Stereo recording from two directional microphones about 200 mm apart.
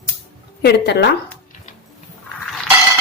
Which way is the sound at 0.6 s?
55° left (ahead or behind).